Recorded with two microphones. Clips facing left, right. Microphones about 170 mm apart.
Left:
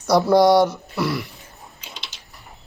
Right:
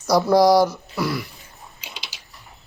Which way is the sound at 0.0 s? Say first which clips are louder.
Left 1 dB; centre (ahead or behind).